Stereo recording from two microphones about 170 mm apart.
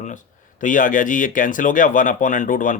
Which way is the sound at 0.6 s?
50° left (ahead or behind).